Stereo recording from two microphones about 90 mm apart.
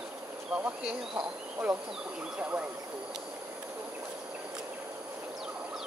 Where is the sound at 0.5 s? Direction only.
15° right (ahead or behind).